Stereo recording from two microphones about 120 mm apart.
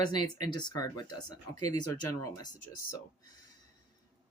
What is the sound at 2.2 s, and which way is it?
Speech, 30° left (ahead or behind).